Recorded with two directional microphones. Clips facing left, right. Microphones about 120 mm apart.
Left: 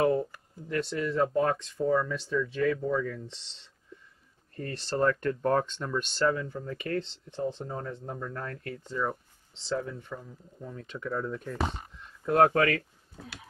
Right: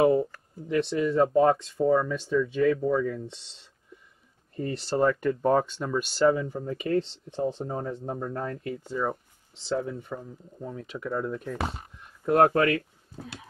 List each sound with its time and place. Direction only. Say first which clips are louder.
0.0 s speech: right 4 dB; 15° right (ahead or behind)
10.8 s speech: right 2 dB; 5° right (ahead or behind)